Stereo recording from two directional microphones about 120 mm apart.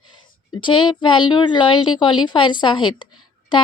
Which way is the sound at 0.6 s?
40° left (ahead or behind).